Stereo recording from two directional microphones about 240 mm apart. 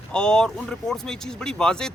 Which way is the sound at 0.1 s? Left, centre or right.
Centre.